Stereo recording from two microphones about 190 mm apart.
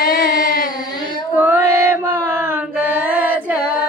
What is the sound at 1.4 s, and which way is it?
Female singing, 10° right (ahead or behind).